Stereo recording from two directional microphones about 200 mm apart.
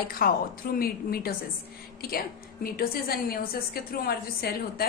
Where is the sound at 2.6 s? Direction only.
50° left (ahead or behind).